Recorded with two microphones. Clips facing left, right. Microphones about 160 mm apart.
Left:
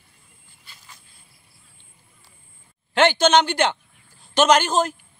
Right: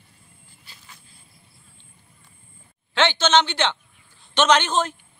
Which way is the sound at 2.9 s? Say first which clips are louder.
Left 4 dB; 45° left (ahead or behind).